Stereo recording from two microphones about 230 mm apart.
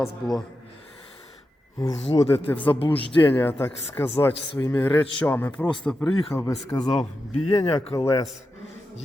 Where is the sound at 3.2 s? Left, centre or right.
Centre.